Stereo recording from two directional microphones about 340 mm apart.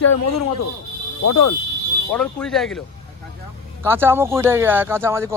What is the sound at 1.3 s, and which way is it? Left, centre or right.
Speech, left.